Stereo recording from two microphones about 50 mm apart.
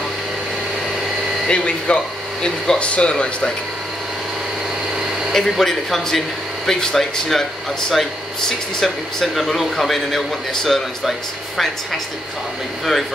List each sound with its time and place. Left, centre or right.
1.5 s speech: left
5.3 s a man's voice: centre